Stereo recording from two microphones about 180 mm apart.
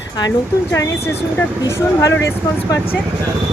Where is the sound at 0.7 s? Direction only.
15° left (ahead or behind).